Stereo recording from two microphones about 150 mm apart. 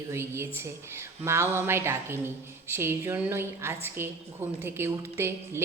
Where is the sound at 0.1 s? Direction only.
15° right (ahead or behind).